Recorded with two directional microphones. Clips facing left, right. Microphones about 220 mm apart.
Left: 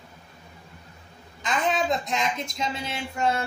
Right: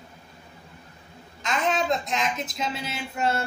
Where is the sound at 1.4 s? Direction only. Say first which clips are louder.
Even; centre (ahead or behind).